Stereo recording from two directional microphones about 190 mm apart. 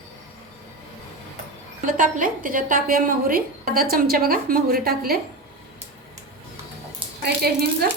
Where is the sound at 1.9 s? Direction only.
45° right (ahead or behind).